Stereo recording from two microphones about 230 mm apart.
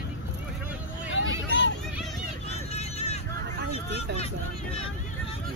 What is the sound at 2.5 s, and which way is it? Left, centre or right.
Vehicle, left.